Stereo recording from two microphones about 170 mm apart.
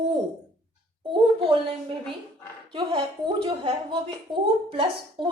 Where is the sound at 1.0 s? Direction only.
30° right (ahead or behind).